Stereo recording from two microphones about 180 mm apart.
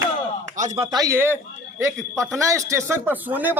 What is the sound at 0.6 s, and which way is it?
Speech, 40° right (ahead or behind).